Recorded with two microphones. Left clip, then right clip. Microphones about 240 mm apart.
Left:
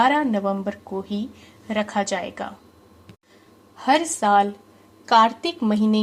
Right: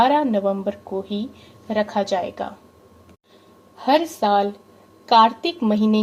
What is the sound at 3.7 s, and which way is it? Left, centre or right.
A woman's voice, left.